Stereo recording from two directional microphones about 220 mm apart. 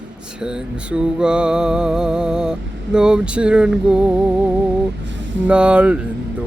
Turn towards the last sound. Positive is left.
turn(degrees=-5)  # may be behind; listen again after turning